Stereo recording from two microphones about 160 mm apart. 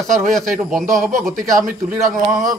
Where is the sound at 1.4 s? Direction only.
15° right (ahead or behind).